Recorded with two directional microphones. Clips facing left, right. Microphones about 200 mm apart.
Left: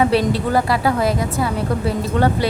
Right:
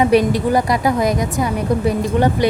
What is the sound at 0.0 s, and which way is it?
A woman's voice, 15° right (ahead or behind).